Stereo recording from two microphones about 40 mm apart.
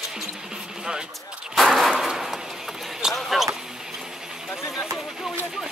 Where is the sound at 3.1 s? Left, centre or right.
Centre.